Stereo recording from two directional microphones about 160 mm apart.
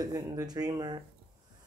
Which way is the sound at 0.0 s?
20° right (ahead or behind).